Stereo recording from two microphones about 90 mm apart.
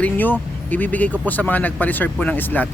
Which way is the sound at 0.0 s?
20° left (ahead or behind).